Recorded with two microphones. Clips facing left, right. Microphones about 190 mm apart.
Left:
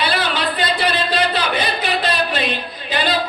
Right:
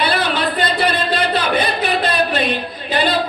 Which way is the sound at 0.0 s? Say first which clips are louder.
Right 2 dB; 55° right (ahead or behind).